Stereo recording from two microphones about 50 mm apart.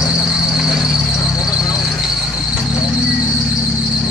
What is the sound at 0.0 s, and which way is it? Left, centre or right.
Vehicle, centre.